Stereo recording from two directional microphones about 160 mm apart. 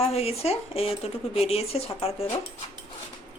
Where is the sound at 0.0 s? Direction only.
40° left (ahead or behind).